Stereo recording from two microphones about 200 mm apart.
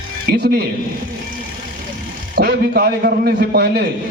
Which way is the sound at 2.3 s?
50° right (ahead or behind).